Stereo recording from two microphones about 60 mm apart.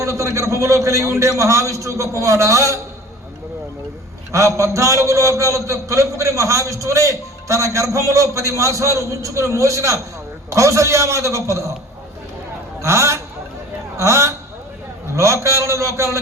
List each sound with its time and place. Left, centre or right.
0.0 s a man's voice: right
4.3 s a man's voice: right
12.8 s a man's voice: right